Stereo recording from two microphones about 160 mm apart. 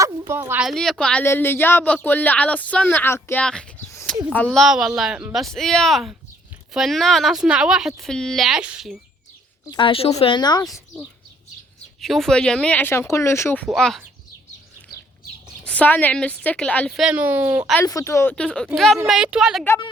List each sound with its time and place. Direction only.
0.0 s a sound: 15° right (ahead or behind)
0.6 s speech: centre (ahead or behind)
3.4 s a sound: 5° left (ahead or behind)
4.5 s speech: centre (ahead or behind)
9.6 s a woman's voice: 30° left (ahead or behind)
10.3 s speech: 25° left (ahead or behind)
11.9 s speech: centre (ahead or behind)
13.7 s speech: centre (ahead or behind)
15.6 s speech: 10° left (ahead or behind)
17.0 s speech: 10° right (ahead or behind)
17.8 s speech: 20° left (ahead or behind); by 19.6 s 5° right (ahead or behind)